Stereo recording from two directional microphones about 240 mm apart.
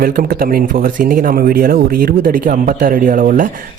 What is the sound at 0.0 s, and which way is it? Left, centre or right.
Speech, right.